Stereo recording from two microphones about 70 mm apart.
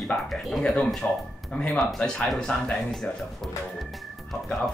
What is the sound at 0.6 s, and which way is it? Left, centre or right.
Speech, centre.